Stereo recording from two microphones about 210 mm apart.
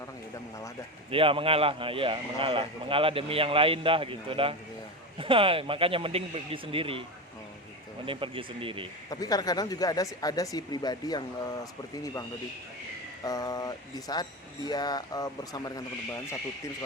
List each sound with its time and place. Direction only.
1.1 s a man's voice: 25° right (ahead or behind)
8.0 s a man's voice: 25° right (ahead or behind)
9.0 s speech: 15° left (ahead or behind)
13.2 s speech: 20° left (ahead or behind)